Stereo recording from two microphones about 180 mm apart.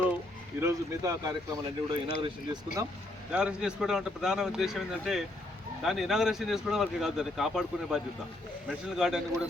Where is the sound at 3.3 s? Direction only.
5° right (ahead or behind).